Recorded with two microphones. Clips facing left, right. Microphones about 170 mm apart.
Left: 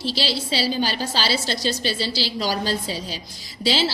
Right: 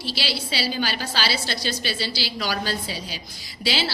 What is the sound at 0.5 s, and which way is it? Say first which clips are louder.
A woman's voice: left 3 dB; 40° left (ahead or behind).